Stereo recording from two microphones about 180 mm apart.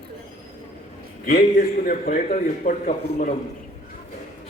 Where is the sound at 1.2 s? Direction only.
55° left (ahead or behind).